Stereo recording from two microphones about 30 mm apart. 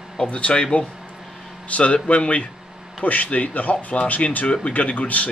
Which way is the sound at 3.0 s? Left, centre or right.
Left.